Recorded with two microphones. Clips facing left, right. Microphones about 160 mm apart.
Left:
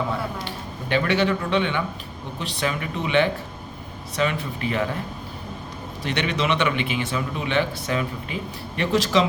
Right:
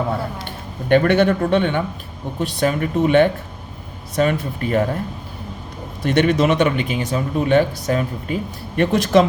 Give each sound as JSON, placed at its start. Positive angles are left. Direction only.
{"t": 0.4, "sound": "a man's voice", "side_deg": -55}
{"t": 6.0, "sound": "a man's voice", "side_deg": -50}